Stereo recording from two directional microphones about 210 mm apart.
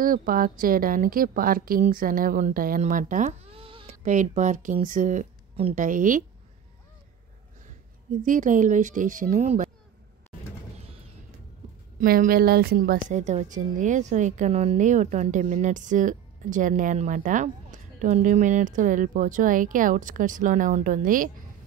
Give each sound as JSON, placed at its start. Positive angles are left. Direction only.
{"t": 0.0, "sound": "a woman's voice", "side_deg": -40}
{"t": 8.2, "sound": "a woman's voice", "side_deg": -40}
{"t": 12.0, "sound": "a woman's voice", "side_deg": -40}